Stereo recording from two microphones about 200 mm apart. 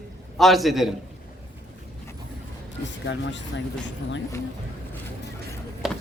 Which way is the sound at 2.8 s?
65° left (ahead or behind).